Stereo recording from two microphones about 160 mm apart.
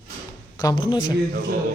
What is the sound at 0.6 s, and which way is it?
Speech, 25° left (ahead or behind).